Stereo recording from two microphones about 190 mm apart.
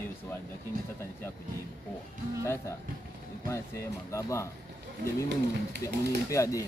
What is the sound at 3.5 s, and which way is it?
Speech, 15° left (ahead or behind).